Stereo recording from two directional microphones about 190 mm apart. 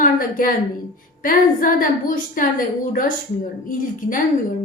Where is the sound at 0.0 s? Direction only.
45° left (ahead or behind).